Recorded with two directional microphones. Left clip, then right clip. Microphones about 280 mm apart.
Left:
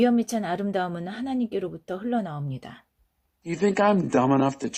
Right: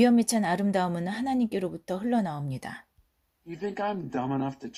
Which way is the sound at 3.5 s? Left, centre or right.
Left.